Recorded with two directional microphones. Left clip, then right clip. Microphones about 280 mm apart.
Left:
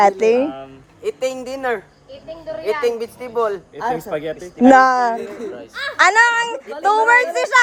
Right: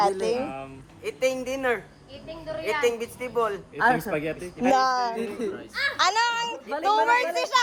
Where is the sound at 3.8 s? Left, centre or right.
Right.